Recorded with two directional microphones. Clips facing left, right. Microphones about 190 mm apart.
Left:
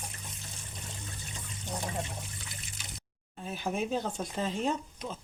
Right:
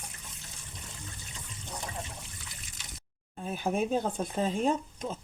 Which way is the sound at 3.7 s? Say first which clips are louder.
Right 3 dB; 45° right (ahead or behind).